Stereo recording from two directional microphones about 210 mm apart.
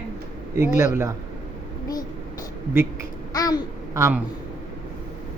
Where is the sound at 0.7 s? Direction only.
10° right (ahead or behind).